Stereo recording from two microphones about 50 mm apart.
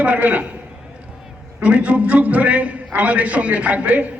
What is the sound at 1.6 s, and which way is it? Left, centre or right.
A man's voice, right.